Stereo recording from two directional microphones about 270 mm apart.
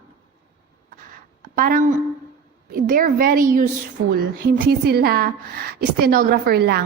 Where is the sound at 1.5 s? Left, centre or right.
Right.